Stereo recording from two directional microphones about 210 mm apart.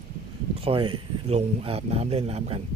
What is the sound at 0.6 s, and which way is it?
Speech, 25° right (ahead or behind).